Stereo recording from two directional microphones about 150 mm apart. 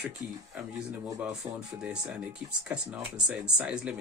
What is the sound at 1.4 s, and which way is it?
Speech, 25° right (ahead or behind).